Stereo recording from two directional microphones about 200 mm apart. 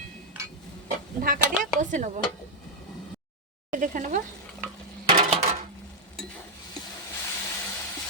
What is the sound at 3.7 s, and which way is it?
Speech, 40° right (ahead or behind).